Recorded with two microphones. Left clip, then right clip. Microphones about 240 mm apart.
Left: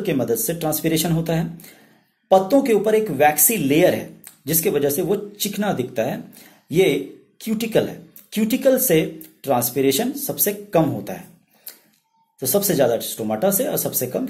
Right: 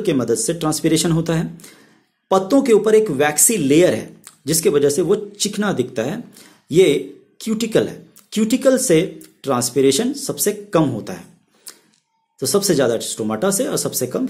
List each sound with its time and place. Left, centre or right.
0.0 s speech: right